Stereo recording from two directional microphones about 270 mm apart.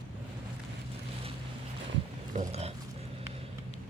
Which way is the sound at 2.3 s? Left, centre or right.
Right.